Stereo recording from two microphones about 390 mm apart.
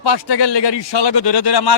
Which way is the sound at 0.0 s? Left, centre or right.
Left.